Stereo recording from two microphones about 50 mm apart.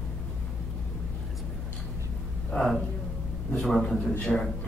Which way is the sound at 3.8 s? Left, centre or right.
Centre.